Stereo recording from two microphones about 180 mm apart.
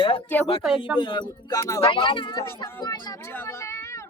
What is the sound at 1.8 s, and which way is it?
Speech, 30° left (ahead or behind).